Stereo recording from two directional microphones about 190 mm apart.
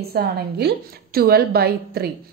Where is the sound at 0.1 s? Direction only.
55° right (ahead or behind).